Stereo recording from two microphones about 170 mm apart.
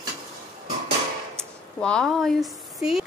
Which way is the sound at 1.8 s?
5° left (ahead or behind).